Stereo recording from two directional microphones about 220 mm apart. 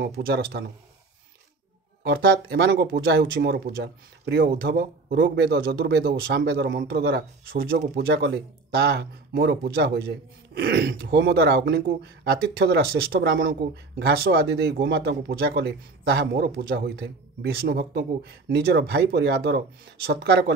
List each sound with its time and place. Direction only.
0.0 s speech: 45° right (ahead or behind)
2.0 s speech: 45° right (ahead or behind)